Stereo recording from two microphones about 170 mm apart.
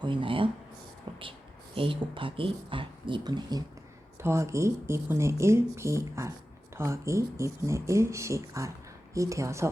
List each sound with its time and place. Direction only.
0.0 s speech: 30° right (ahead or behind)
1.1 s a sound: 30° right (ahead or behind)
1.7 s speech: 30° right (ahead or behind)